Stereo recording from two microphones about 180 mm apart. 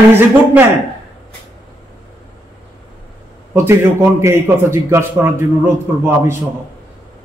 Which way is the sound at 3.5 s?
15° right (ahead or behind).